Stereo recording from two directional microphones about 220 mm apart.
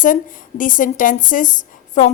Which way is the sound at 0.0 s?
35° left (ahead or behind).